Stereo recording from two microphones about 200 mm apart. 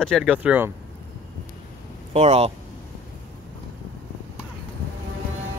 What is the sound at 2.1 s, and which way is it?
Speech, 30° right (ahead or behind).